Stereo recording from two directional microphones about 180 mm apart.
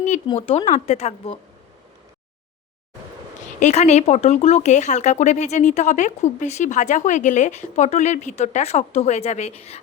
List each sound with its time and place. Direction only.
0.3 s speech: 35° left (ahead or behind)
3.6 s speech: 40° left (ahead or behind)